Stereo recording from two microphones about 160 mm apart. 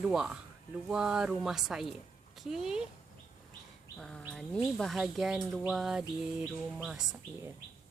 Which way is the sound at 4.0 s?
5° left (ahead or behind).